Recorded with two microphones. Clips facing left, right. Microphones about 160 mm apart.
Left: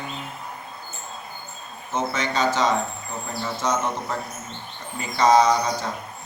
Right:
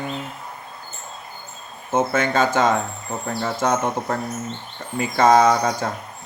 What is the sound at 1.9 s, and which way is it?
Speech, 50° right (ahead or behind).